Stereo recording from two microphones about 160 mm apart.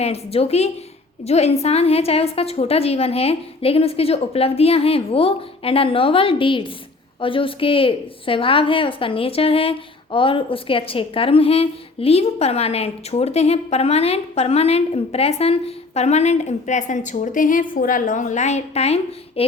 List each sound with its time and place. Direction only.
0.0 s a woman's voice: 40° left (ahead or behind)